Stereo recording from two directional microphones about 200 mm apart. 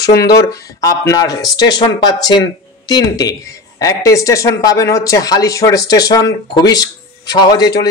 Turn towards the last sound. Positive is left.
turn(degrees=20)  # may be behind; listen again after turning